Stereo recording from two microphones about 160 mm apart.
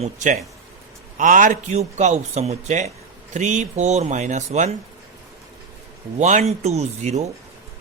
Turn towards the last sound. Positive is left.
turn(degrees=-45)  # may be behind; listen again after turning